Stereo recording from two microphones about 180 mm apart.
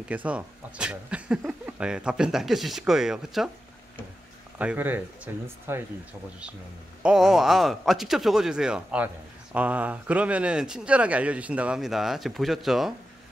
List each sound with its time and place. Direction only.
0.1 s speech: 10° right (ahead or behind)
4.6 s speech: 10° right (ahead or behind)
7.0 s speech: 5° right (ahead or behind)